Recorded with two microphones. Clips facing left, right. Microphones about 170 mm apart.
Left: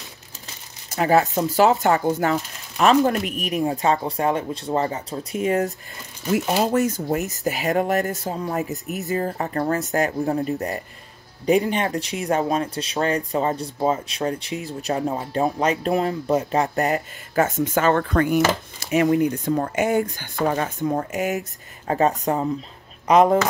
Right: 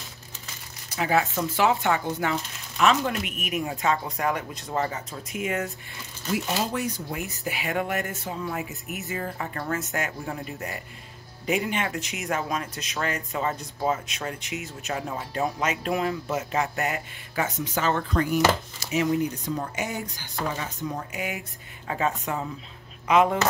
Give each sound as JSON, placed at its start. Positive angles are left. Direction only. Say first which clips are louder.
{"t": 0.8, "sound": "speech", "louder": "left 6 dB", "side_deg": 45}
{"t": 6.3, "sound": "speech", "louder": "left 7 dB", "side_deg": 50}